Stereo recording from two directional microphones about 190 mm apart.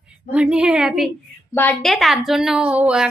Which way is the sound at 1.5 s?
5° left (ahead or behind).